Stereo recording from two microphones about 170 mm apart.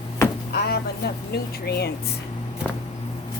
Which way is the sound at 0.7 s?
70° left (ahead or behind).